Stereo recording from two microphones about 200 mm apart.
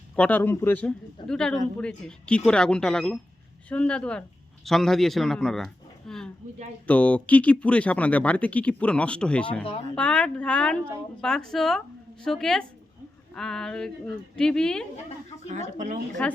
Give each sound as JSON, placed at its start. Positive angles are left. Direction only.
{"t": 0.2, "sound": "speech", "side_deg": 10}
{"t": 15.4, "sound": "speech", "side_deg": -40}
{"t": 16.2, "sound": "speech", "side_deg": 5}